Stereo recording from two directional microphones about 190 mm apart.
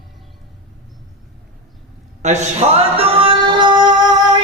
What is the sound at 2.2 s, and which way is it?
Male singing, 35° right (ahead or behind).